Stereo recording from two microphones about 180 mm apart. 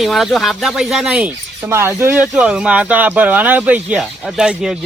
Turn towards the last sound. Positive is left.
turn(degrees=-5)  # may be behind; listen again after turning